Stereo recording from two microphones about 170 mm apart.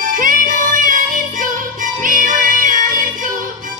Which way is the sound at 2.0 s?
50° right (ahead or behind).